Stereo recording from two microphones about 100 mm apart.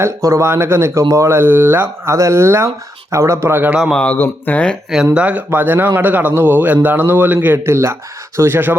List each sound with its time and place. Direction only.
0.0 s a man's voice: 30° right (ahead or behind)
3.9 s speech: 15° left (ahead or behind)
5.1 s a man's voice: 15° right (ahead or behind)